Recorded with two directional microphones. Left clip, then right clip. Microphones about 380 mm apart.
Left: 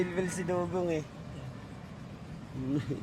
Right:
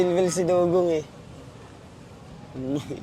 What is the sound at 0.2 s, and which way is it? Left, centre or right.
Speech, centre.